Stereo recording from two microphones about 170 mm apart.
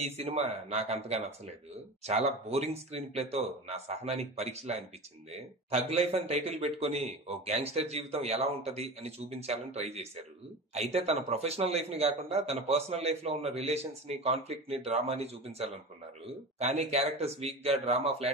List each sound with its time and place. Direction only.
0.0 s a man's voice: 40° right (ahead or behind)